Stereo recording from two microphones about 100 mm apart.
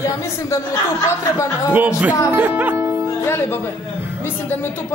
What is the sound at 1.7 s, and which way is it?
A man's voice, 15° right (ahead or behind).